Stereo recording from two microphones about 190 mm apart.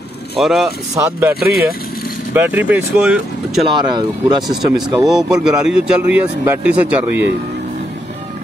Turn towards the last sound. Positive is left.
turn(degrees=-10)  # may be behind; listen again after turning